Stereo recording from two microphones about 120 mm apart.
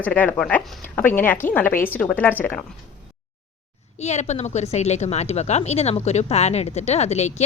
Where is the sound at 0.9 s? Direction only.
15° left (ahead or behind).